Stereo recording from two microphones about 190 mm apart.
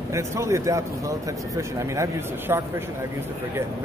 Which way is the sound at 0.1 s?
15° right (ahead or behind).